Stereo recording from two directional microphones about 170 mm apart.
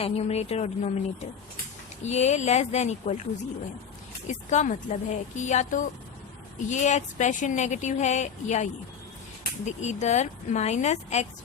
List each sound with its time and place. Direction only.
0.0 s speech: 40° left (ahead or behind)
4.3 s speech: 45° left (ahead or behind)